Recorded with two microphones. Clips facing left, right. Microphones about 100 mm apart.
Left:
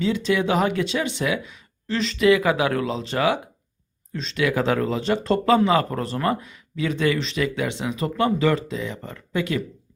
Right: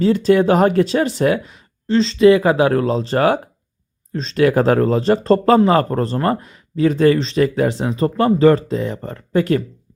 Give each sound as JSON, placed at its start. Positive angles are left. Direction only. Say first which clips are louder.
{"t": 0.0, "sound": "speech", "louder": "right 8 dB", "side_deg": -40}